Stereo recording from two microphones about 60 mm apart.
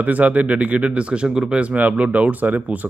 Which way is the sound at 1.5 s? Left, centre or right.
Right.